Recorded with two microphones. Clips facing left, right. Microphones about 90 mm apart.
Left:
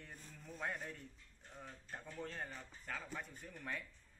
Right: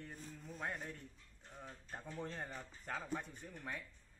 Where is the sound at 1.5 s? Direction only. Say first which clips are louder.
Even; 5° right (ahead or behind).